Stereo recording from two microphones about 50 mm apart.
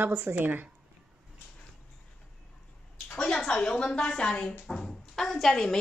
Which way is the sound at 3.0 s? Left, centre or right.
Left.